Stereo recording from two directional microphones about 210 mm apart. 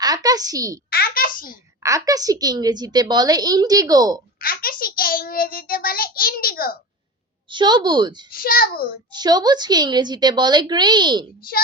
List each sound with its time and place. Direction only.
0.0 s a woman's voice: 20° right (ahead or behind)
0.9 s a sound: 45° left (ahead or behind)
1.8 s a woman's voice: 15° right (ahead or behind)
4.4 s a child's voice: 45° left (ahead or behind)
7.5 s a woman's voice: 20° right (ahead or behind)
8.3 s a child's voice: 45° left (ahead or behind)
9.1 s a woman's voice: 20° right (ahead or behind)